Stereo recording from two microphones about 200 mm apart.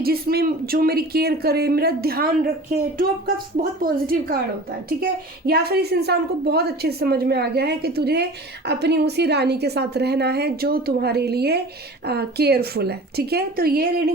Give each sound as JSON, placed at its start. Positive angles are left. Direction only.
{"t": 0.0, "sound": "a woman's voice", "side_deg": -50}
{"t": 5.5, "sound": "a woman's voice", "side_deg": -50}